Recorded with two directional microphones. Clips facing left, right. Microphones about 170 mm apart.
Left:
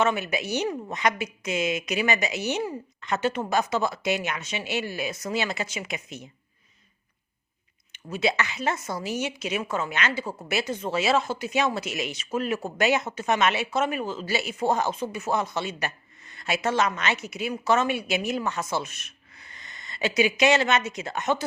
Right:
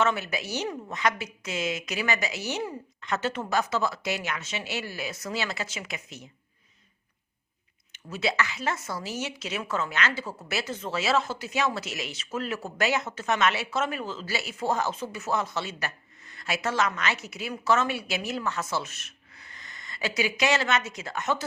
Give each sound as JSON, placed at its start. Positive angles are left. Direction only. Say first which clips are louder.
{"t": 0.0, "sound": "speech", "louder": "left 2 dB", "side_deg": 15}
{"t": 7.9, "sound": "speech", "louder": "left 2 dB", "side_deg": 20}